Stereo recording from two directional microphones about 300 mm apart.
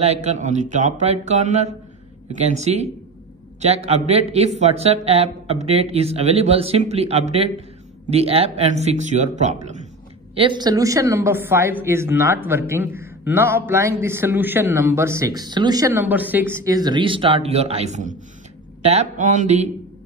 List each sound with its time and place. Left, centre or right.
0.0 s a man's voice: right